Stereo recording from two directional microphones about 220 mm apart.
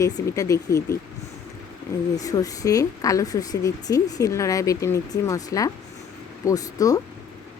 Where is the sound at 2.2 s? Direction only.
15° left (ahead or behind).